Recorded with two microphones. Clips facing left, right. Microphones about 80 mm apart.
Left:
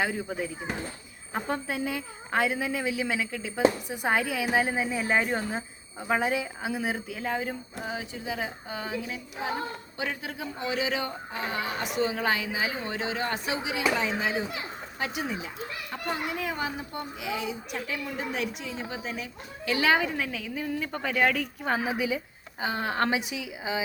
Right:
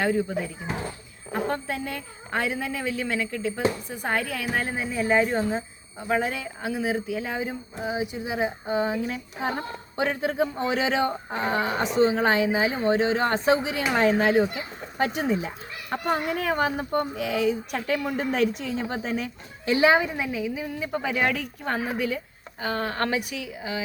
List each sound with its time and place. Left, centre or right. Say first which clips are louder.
0.0 s a woman's voice: right 5 dB; centre
1.5 s a woman's voice: left 2 dB; centre
7.9 s speech: right 6 dB; centre
9.0 s speech: right 4 dB; right
19.6 s a woman's voice: right 5 dB; right; by 23.8 s centre